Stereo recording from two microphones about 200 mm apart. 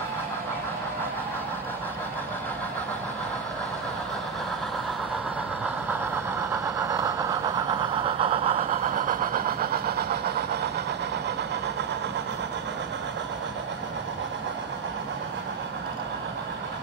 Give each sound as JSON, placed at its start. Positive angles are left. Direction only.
{"t": 8.0, "sound": "vehicle", "side_deg": -30}
{"t": 8.9, "sound": "vehicle", "side_deg": -45}